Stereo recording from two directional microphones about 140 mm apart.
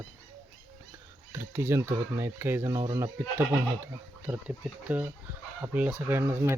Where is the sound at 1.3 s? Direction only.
15° right (ahead or behind).